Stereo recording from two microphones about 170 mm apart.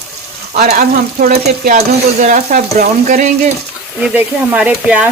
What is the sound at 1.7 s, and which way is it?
Frying, 45° right (ahead or behind).